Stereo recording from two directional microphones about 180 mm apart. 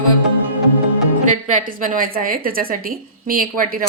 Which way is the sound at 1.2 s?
50° right (ahead or behind).